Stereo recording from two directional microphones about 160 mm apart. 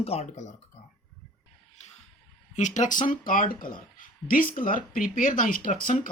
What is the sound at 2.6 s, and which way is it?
Speech, 50° left (ahead or behind).